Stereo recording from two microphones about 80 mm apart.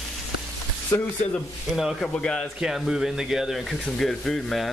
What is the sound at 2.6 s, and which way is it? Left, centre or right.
Speech, centre.